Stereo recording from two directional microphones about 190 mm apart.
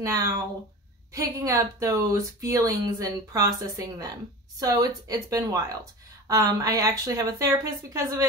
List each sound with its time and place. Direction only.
0.0 s speech: 15° right (ahead or behind)